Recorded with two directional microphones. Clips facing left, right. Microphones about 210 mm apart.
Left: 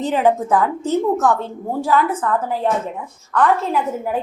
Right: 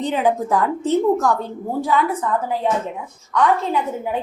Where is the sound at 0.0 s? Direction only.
Centre (ahead or behind).